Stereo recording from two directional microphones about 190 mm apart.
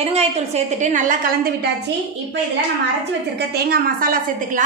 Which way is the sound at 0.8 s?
40° right (ahead or behind).